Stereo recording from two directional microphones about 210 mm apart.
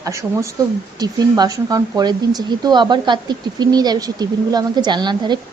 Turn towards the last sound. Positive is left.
turn(degrees=-20)  # may be behind; listen again after turning